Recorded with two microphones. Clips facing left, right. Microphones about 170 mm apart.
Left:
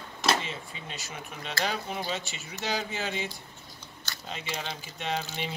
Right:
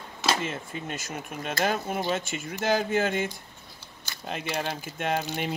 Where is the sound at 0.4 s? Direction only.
50° right (ahead or behind).